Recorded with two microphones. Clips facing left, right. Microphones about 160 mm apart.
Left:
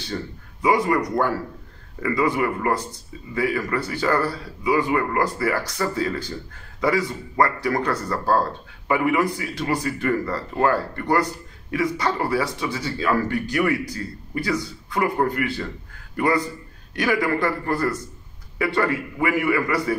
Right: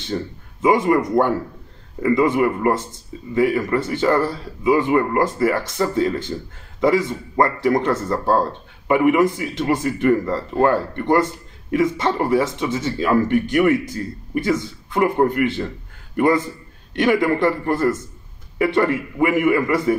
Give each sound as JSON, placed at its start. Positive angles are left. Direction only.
{"t": 0.0, "sound": "speech", "side_deg": -20}